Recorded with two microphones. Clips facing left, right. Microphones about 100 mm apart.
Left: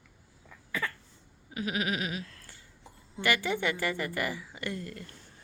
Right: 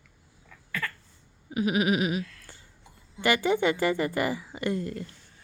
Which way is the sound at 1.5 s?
15° right (ahead or behind).